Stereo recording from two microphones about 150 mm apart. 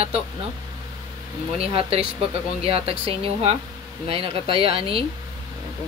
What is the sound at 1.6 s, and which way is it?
Speech, 40° right (ahead or behind).